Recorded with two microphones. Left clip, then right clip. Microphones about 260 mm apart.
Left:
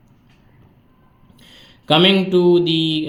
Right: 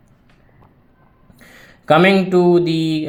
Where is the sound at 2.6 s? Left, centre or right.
Right.